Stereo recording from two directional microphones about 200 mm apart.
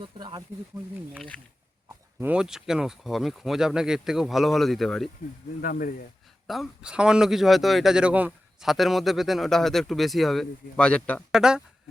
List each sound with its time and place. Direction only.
0.0 s speech: 25° right (ahead or behind)
2.1 s speech: 5° right (ahead or behind)
5.6 s speech: 45° left (ahead or behind)
6.5 s speech: centre (ahead or behind)
11.3 s speech: 5° right (ahead or behind)